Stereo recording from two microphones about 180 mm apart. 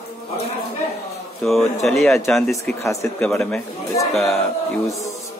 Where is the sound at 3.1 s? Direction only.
5° left (ahead or behind).